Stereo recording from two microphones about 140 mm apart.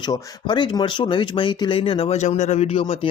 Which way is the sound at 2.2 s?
55° left (ahead or behind).